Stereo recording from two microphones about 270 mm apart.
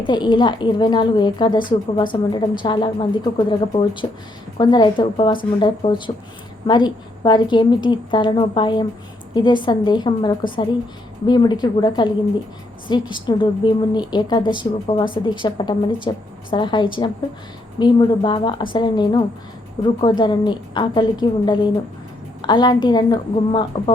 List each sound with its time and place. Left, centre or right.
0.0 s a woman's voice: centre